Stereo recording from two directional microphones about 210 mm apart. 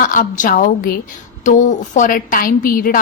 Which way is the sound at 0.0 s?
40° left (ahead or behind).